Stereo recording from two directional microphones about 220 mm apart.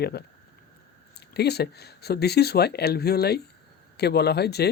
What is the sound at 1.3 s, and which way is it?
Speech, 45° left (ahead or behind).